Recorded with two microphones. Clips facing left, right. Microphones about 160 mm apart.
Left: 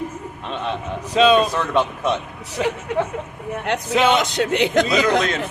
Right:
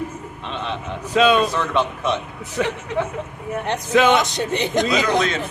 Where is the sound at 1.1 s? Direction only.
30° left (ahead or behind).